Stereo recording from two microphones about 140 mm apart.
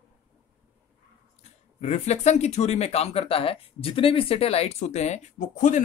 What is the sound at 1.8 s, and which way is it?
Speech, 50° left (ahead or behind).